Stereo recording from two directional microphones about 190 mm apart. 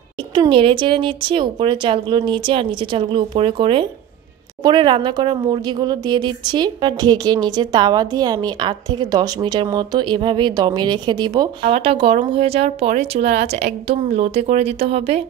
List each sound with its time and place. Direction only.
0.3 s speech: 25° right (ahead or behind)